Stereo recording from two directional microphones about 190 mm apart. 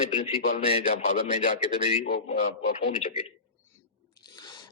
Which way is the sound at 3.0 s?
35° left (ahead or behind).